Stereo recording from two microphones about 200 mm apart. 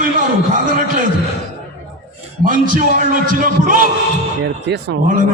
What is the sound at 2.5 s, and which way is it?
Speech, 40° right (ahead or behind).